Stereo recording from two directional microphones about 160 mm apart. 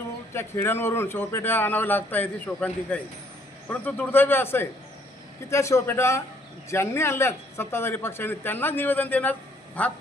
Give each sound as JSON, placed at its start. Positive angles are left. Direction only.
{"t": 0.3, "sound": "a man's voice", "side_deg": 15}